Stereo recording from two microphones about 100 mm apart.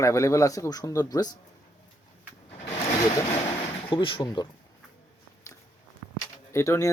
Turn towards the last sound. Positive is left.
turn(degrees=30)  # may be behind; listen again after turning